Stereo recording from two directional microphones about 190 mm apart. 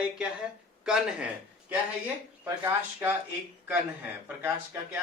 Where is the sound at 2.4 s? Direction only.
10° right (ahead or behind).